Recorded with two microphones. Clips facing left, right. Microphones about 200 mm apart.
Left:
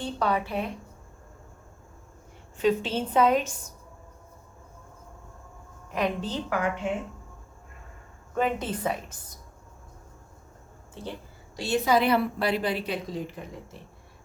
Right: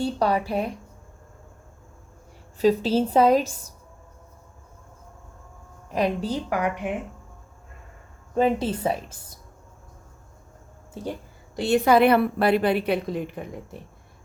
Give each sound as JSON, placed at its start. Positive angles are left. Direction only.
{"t": 0.0, "sound": "a woman's voice", "side_deg": -35}
{"t": 2.6, "sound": "a woman's voice", "side_deg": -35}
{"t": 5.9, "sound": "a woman's voice", "side_deg": -35}
{"t": 6.2, "sound": "a woman's voice", "side_deg": -10}
{"t": 8.4, "sound": "a woman's voice", "side_deg": -30}
{"t": 11.5, "sound": "a woman's voice", "side_deg": -55}